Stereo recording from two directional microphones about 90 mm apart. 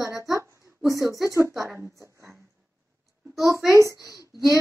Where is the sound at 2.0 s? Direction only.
30° right (ahead or behind).